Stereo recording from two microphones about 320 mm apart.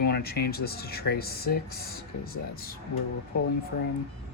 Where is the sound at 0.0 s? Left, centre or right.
Left.